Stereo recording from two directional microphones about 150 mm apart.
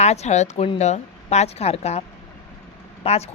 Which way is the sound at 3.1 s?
45° left (ahead or behind).